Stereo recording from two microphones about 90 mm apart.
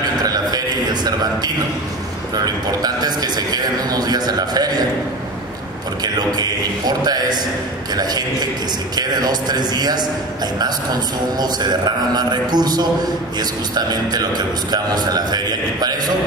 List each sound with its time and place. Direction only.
0.2 s a sound: 45° right (ahead or behind)
2.3 s a man's voice: 45° right (ahead or behind)
6.9 s a man's voice: 50° right (ahead or behind)